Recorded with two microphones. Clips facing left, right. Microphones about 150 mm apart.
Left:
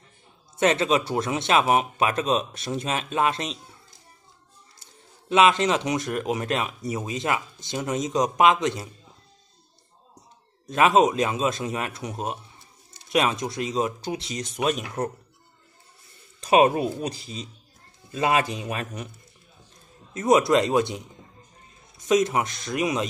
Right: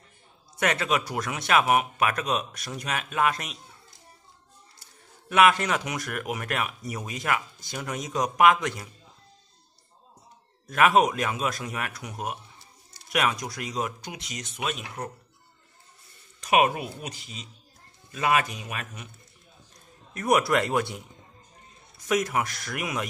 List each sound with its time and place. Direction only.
0.6 s speech: 25° left (ahead or behind)
5.3 s speech: 20° left (ahead or behind)
10.7 s speech: 20° left (ahead or behind); by 15.0 s 45° left (ahead or behind)
16.3 s speech: 30° left (ahead or behind)
20.2 s speech: 20° left (ahead or behind)